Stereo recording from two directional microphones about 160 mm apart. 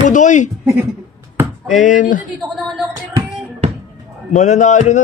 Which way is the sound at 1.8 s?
55° left (ahead or behind).